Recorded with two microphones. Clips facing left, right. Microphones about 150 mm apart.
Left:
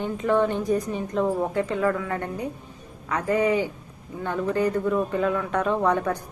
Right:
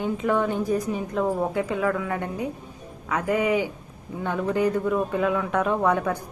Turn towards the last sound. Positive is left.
turn(degrees=-5)  # may be behind; listen again after turning